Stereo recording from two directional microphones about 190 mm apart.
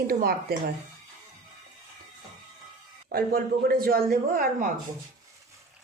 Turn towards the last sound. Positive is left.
turn(degrees=-50)  # may be behind; listen again after turning